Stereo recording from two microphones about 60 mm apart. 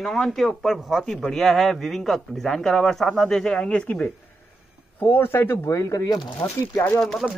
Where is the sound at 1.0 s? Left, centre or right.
Centre.